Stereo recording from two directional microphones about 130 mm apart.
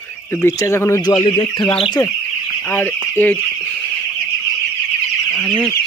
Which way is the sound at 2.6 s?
15° left (ahead or behind).